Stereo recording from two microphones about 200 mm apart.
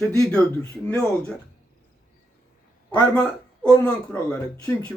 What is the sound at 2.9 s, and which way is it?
Speech, 5° left (ahead or behind).